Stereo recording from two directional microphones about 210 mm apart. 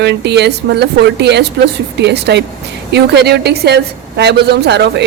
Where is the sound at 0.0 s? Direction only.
55° right (ahead or behind).